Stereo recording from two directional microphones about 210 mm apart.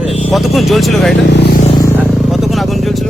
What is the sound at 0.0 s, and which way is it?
Music, 30° left (ahead or behind).